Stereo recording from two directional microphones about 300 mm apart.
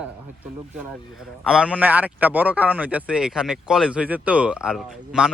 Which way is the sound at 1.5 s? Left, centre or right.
Centre.